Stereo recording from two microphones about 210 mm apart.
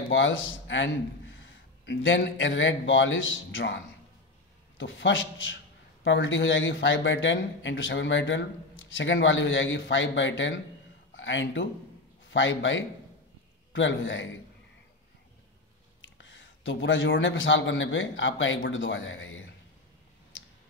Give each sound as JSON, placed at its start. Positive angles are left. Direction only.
{"t": 0.1, "sound": "a man's voice", "side_deg": 65}
{"t": 16.0, "sound": "a man's voice", "side_deg": 65}